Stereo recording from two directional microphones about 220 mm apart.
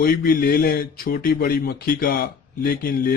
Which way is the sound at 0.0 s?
40° left (ahead or behind).